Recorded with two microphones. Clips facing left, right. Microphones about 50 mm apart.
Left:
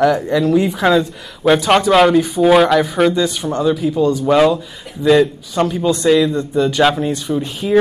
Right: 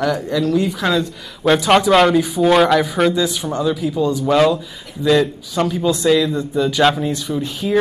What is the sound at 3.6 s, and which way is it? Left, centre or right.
Speech, centre.